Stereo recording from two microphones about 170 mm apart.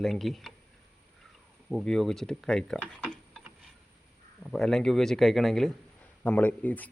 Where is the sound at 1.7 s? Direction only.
Centre (ahead or behind).